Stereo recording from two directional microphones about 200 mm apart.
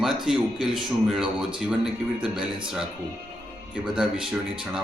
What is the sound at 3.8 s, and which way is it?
Speech, 5° right (ahead or behind).